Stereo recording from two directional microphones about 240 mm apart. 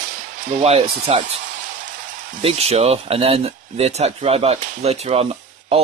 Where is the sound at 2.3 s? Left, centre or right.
Right.